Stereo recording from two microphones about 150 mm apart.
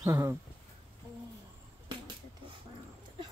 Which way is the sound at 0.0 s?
20° right (ahead or behind).